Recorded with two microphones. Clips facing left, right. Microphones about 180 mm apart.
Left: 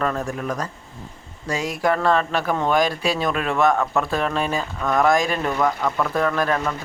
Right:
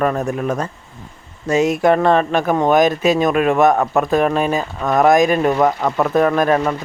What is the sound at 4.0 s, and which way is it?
Speech, 15° right (ahead or behind).